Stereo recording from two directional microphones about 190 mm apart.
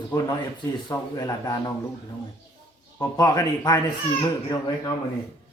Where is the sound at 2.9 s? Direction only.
20° left (ahead or behind).